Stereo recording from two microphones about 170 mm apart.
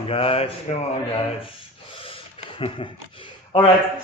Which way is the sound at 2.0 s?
35° left (ahead or behind).